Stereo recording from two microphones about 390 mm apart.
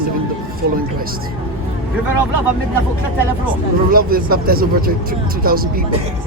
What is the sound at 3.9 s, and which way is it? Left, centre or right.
Speech, right.